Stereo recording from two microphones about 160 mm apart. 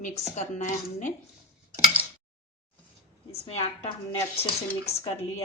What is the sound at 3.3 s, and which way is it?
Speech, 40° left (ahead or behind).